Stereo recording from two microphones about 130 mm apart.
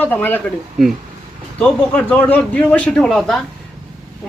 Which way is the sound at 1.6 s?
10° left (ahead or behind).